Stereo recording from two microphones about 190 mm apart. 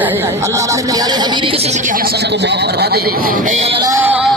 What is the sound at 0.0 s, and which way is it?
A woman's voice, 10° right (ahead or behind).